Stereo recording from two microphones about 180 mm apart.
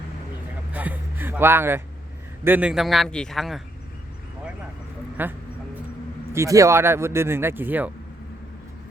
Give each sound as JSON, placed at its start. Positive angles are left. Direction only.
{"t": 0.7, "sound": "a sound", "side_deg": -10}
{"t": 2.4, "sound": "a man's voice", "side_deg": -10}
{"t": 5.2, "sound": "speech", "side_deg": -10}